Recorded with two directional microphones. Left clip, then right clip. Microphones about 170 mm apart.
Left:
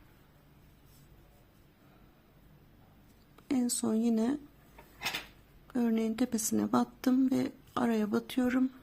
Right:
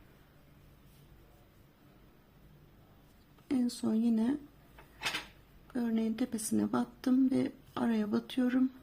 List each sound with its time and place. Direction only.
3.5 s speech: 25° left (ahead or behind)
5.7 s a woman's voice: 20° left (ahead or behind)